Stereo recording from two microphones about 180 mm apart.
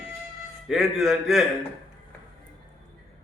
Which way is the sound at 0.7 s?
Centre (ahead or behind).